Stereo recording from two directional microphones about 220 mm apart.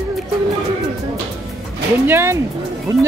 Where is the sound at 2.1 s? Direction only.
10° right (ahead or behind).